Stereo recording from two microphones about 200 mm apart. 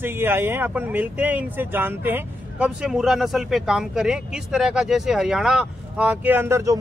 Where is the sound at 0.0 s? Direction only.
10° right (ahead or behind).